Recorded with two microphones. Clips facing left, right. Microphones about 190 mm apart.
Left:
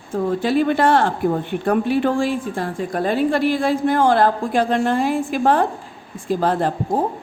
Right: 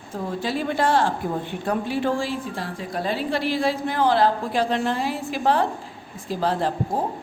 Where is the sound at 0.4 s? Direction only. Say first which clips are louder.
Left 5 dB; 60° left (ahead or behind).